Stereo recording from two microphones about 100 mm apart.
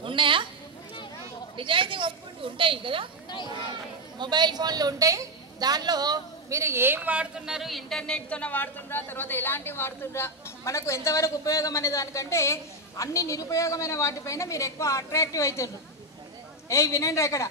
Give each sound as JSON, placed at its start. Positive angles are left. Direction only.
{"t": 0.0, "sound": "a sound", "side_deg": -55}
{"t": 1.6, "sound": "a woman's voice", "side_deg": -55}
{"t": 4.2, "sound": "a woman's voice", "side_deg": -45}
{"t": 6.6, "sound": "speech", "side_deg": -25}